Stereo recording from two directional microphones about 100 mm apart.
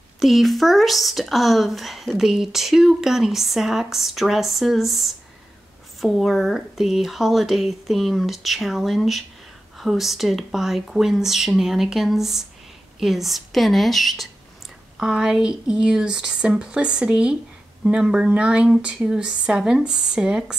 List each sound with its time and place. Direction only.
0.2 s speech: centre (ahead or behind)